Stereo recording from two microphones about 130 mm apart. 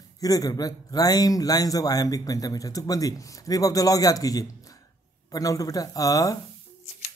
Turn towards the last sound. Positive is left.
turn(degrees=25)  # may be behind; listen again after turning